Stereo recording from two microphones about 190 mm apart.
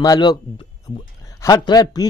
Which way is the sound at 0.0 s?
20° left (ahead or behind).